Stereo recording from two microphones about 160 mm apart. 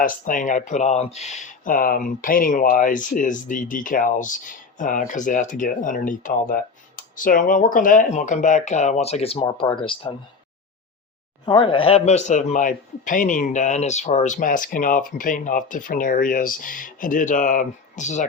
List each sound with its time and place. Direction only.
0.0 s speech: 55° left (ahead or behind); by 10.2 s 30° left (ahead or behind)
11.4 s speech: 30° left (ahead or behind); by 18.3 s 50° left (ahead or behind)